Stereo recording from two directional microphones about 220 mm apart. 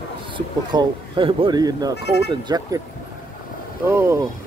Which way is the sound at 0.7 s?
20° right (ahead or behind).